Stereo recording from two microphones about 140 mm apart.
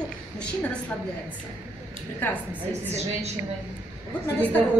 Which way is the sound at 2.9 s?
50° right (ahead or behind).